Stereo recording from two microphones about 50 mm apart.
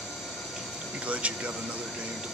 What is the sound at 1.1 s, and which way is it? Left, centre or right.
Speech, right.